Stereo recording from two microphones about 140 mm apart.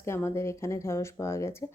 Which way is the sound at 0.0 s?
20° left (ahead or behind).